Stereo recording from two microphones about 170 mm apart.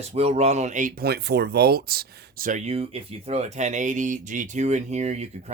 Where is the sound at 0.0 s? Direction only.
40° right (ahead or behind).